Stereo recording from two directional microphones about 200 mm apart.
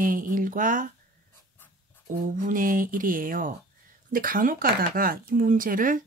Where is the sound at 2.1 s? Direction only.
40° right (ahead or behind).